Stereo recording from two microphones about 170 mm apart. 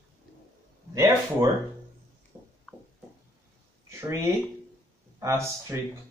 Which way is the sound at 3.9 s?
15° right (ahead or behind).